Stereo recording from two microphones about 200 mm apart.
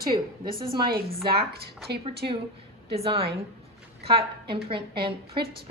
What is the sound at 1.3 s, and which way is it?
Speech, 55° right (ahead or behind).